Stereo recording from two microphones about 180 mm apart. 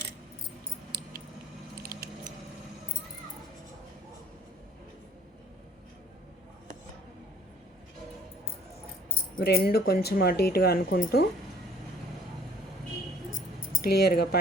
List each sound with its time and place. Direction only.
9.4 s speech: 60° left (ahead or behind)
13.8 s speech: 60° left (ahead or behind)